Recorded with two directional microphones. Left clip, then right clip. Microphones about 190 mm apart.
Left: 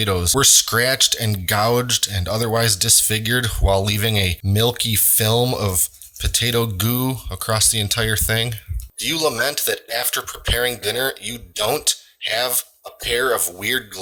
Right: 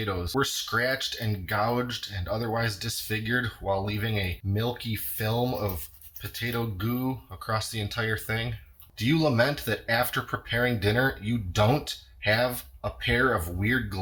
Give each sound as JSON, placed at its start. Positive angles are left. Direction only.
{"t": 0.0, "sound": "speech", "side_deg": 50}